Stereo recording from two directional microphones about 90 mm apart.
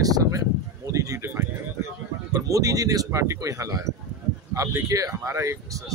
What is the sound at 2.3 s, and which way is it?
Speech, 40° right (ahead or behind).